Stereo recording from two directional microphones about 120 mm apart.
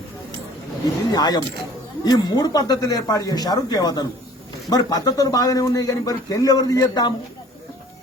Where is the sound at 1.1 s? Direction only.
35° left (ahead or behind).